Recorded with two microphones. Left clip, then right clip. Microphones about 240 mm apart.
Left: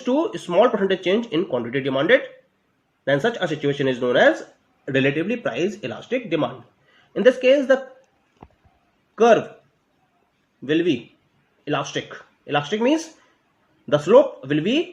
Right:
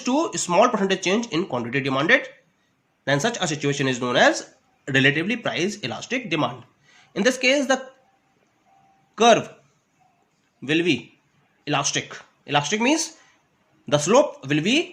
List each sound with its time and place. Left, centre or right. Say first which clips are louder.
0.0 s speech: left 1 dB; right
9.1 s speech: left 1 dB; right
10.7 s speech: left 1 dB; right